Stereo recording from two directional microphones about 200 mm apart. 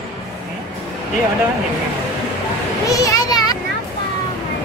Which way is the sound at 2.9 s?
15° left (ahead or behind).